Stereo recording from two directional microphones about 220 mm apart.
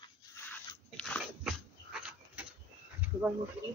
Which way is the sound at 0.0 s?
10° left (ahead or behind).